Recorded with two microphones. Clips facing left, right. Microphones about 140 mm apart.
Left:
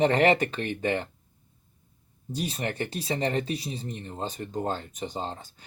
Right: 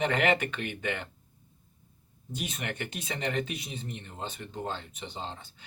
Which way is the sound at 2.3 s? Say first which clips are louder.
Left 5 dB; 35° left (ahead or behind).